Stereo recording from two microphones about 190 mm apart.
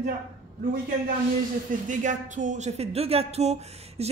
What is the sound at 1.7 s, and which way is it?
Speech, 40° right (ahead or behind).